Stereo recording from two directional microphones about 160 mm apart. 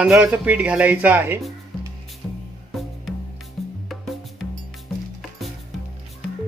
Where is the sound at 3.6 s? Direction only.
Centre (ahead or behind).